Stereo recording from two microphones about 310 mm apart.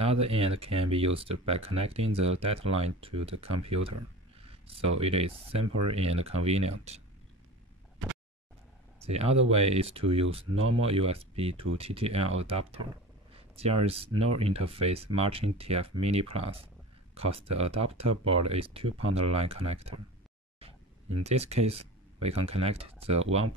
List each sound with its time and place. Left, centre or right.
0.0 s speech: centre
4.4 s a sound: centre
5.0 s speech: centre
8.0 s a sound: right
9.0 s speech: centre
21.2 s speech: centre